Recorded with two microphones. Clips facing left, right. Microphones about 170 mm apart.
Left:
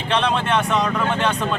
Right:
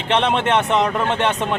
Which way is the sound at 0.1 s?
20° right (ahead or behind).